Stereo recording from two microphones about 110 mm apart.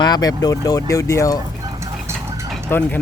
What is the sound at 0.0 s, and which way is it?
Speech, 35° left (ahead or behind).